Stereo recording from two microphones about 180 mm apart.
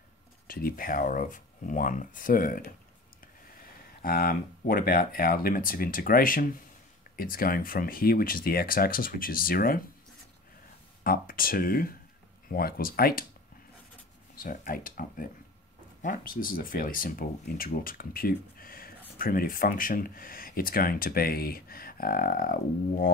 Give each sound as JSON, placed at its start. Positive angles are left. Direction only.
{"t": 0.5, "sound": "speech", "side_deg": 55}
{"t": 11.1, "sound": "speech", "side_deg": 50}
{"t": 14.3, "sound": "speech", "side_deg": 50}